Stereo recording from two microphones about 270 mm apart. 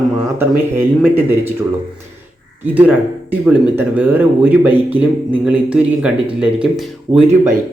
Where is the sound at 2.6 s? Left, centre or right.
Centre.